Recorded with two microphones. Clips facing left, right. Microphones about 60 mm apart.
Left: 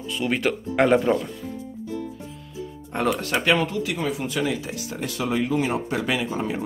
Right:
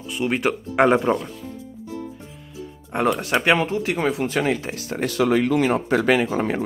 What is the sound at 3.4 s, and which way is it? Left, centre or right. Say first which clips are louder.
Speech: right 2 dB; right.